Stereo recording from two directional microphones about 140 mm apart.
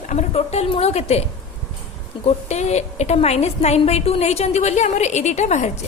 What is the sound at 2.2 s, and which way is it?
A woman's voice, 50° left (ahead or behind).